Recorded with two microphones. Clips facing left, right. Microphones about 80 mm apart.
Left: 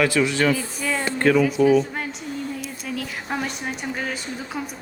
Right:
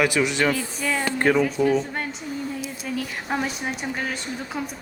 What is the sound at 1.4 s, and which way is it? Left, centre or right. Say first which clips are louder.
Speech: left 3 dB; centre.